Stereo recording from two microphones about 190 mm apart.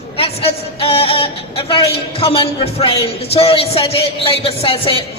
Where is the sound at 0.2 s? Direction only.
30° left (ahead or behind).